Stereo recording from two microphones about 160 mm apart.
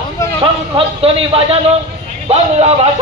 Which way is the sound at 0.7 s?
35° right (ahead or behind).